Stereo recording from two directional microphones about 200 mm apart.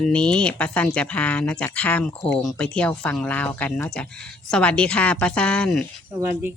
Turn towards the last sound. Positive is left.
turn(degrees=-10)  # may be behind; listen again after turning